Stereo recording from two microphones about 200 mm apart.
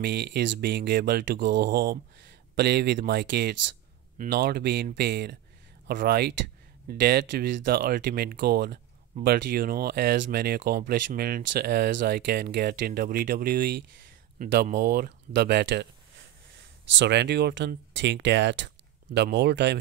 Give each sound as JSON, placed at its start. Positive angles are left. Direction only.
{"t": 0.0, "sound": "speech", "side_deg": -55}
{"t": 16.9, "sound": "speech", "side_deg": -60}